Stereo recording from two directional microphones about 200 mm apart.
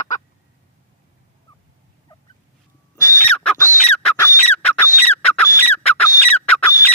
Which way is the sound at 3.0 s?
15° left (ahead or behind).